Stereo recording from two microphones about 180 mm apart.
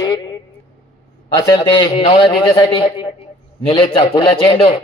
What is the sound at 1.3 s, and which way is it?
A man's voice, 25° left (ahead or behind).